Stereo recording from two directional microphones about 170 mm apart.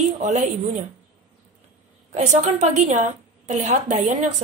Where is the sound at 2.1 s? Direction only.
40° right (ahead or behind).